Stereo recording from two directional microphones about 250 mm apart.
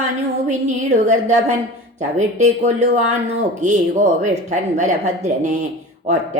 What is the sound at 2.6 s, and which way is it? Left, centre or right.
A woman's voice, right.